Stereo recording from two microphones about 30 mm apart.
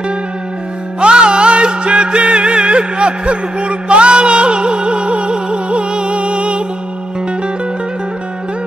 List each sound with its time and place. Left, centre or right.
1.0 s music: right